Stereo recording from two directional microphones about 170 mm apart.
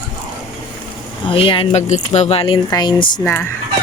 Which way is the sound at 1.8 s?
45° left (ahead or behind).